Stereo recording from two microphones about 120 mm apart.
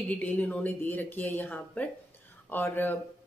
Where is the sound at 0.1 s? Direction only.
10° left (ahead or behind).